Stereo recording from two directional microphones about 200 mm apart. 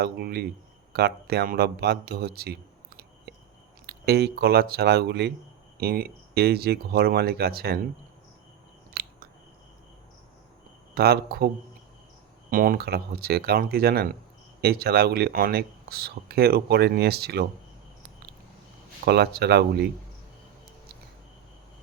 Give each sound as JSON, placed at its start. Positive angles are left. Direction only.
{"t": 0.0, "sound": "speech", "side_deg": -55}
{"t": 8.9, "sound": "chewing", "side_deg": -50}
{"t": 10.9, "sound": "speech", "side_deg": -50}
{"t": 19.0, "sound": "speech", "side_deg": -55}